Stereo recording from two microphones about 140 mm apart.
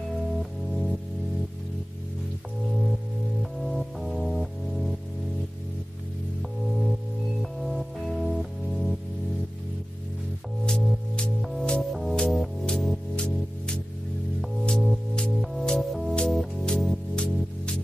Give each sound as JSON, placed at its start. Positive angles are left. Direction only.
{"t": 0.4, "sound": "music", "side_deg": 0}
{"t": 3.6, "sound": "music", "side_deg": 0}
{"t": 7.6, "sound": "music", "side_deg": 0}
{"t": 10.6, "sound": "music", "side_deg": 5}